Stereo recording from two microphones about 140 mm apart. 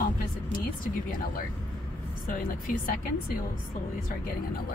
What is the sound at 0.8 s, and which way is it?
Speech, 90° left.